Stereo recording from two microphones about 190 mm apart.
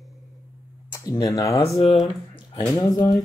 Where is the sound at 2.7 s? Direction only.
20° left (ahead or behind).